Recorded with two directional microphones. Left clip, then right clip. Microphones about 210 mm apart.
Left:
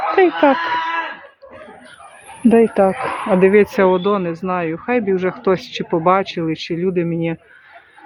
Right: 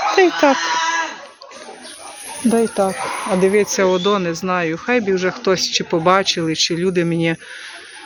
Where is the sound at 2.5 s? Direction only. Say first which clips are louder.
Left 4 dB; 25° left (ahead or behind).